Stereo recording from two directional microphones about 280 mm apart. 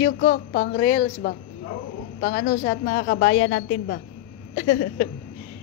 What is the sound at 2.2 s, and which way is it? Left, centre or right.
A woman's voice, left.